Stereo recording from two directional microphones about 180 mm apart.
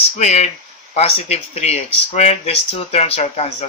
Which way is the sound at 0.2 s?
40° left (ahead or behind).